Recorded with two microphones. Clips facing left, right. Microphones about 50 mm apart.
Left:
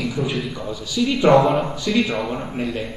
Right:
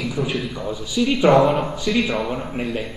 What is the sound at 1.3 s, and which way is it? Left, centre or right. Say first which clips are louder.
Speech: left 1 dB; centre.